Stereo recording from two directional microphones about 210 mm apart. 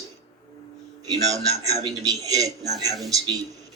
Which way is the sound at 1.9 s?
15° right (ahead or behind).